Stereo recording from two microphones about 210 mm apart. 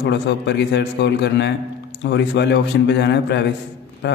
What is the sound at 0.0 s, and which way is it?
Speech, 50° left (ahead or behind).